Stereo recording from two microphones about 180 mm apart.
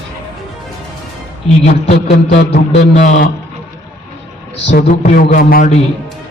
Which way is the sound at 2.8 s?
45° left (ahead or behind).